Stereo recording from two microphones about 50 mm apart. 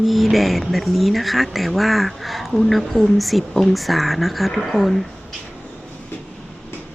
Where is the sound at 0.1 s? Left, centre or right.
Centre.